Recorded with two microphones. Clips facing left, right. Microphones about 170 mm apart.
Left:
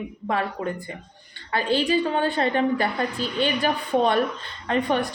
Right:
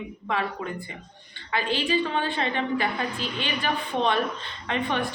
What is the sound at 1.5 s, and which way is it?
A woman's voice, 40° left (ahead or behind).